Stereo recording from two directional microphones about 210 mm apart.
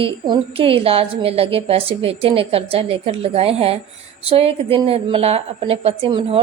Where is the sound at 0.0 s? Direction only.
25° right (ahead or behind).